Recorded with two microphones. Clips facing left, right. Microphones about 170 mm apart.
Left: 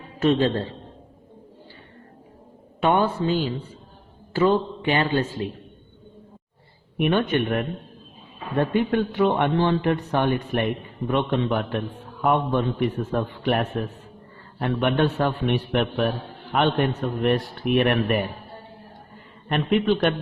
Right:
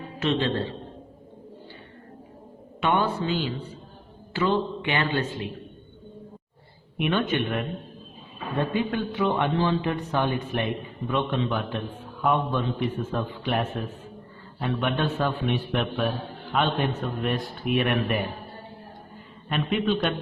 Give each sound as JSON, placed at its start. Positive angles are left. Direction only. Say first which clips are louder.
{"t": 0.2, "sound": "a man's voice", "louder": "left 5 dB", "side_deg": 40}
{"t": 2.8, "sound": "a man's voice", "louder": "left 4 dB", "side_deg": 40}
{"t": 6.9, "sound": "a man's voice", "louder": "left 4 dB", "side_deg": 55}
{"t": 8.7, "sound": "a man's voice", "louder": "left 5 dB", "side_deg": 65}
{"t": 19.5, "sound": "a man's voice", "louder": "left 4 dB", "side_deg": 55}